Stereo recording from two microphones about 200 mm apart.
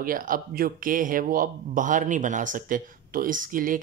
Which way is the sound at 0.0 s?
45° right (ahead or behind).